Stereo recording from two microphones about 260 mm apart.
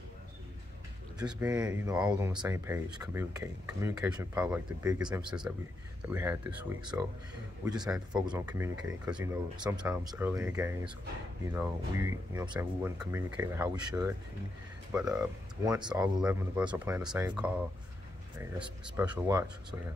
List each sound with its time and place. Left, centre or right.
1.4 s speech: centre
8.1 s speech: centre